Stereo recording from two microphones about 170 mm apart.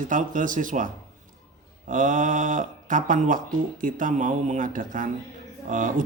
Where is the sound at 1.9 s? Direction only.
50° right (ahead or behind).